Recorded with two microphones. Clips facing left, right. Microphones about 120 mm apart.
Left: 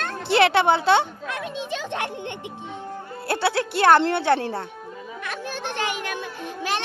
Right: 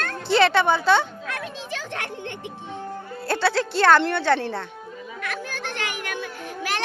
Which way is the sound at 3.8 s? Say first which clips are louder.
Left 1 dB; 20° left (ahead or behind).